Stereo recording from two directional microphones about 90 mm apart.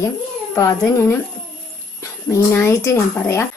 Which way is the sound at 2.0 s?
30° left (ahead or behind).